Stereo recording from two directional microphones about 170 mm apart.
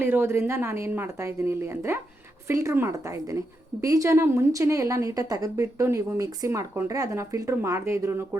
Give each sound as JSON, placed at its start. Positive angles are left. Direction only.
{"t": 0.0, "sound": "a woman's voice", "side_deg": -15}